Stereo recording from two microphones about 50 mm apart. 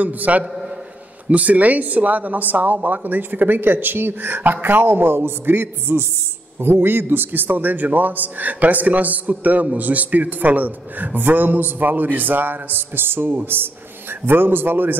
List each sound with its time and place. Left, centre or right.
0.0 s a man's voice: right